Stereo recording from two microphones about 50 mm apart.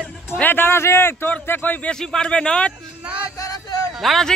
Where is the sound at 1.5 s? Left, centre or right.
Left.